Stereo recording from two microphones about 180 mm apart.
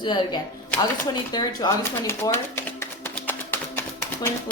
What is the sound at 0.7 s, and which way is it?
Typewriter, 20° left (ahead or behind).